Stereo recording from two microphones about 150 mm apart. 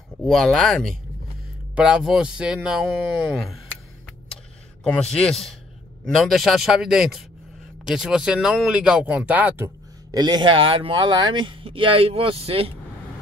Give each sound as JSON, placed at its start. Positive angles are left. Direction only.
{"t": 0.2, "sound": "speech", "side_deg": 5}
{"t": 4.8, "sound": "speech", "side_deg": 5}
{"t": 10.1, "sound": "speech", "side_deg": -30}